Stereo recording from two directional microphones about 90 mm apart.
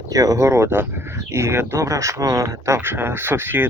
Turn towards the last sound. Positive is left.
turn(degrees=-25)  # may be behind; listen again after turning